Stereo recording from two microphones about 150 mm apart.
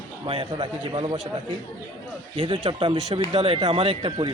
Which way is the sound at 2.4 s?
35° right (ahead or behind).